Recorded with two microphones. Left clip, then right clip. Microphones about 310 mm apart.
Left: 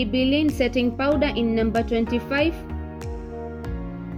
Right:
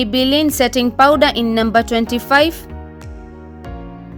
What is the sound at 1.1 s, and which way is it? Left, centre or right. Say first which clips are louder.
Speech: right 9 dB; right.